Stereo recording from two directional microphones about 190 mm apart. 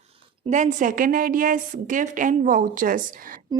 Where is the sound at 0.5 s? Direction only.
40° right (ahead or behind).